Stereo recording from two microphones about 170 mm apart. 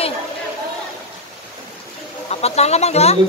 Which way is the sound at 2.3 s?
40° left (ahead or behind).